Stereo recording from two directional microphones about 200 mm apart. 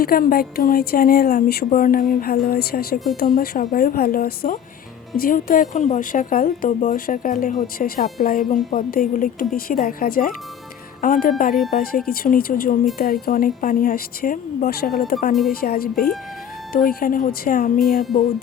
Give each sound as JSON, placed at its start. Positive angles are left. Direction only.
{"t": 0.0, "sound": "a woman's voice", "side_deg": 45}